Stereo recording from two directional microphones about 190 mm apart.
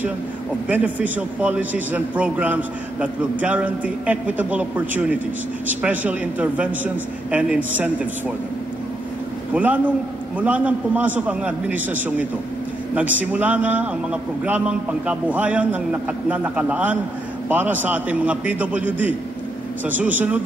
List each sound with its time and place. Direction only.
0.7 s a man's voice: 10° right (ahead or behind)
9.5 s a man's voice: 5° right (ahead or behind)